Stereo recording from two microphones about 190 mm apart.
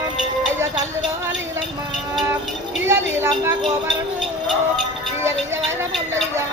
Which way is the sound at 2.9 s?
15° right (ahead or behind).